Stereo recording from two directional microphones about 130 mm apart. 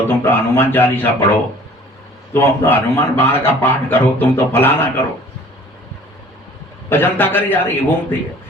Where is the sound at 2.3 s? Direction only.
20° left (ahead or behind).